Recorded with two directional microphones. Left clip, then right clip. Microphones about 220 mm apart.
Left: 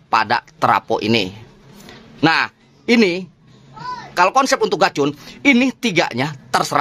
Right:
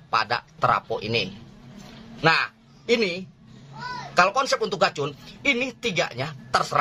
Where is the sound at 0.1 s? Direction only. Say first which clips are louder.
Left 7 dB; 45° left (ahead or behind).